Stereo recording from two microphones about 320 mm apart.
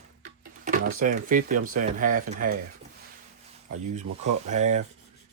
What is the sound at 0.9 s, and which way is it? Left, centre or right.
Speech, right.